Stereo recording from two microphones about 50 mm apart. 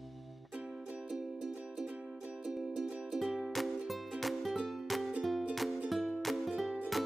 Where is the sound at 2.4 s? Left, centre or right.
Centre.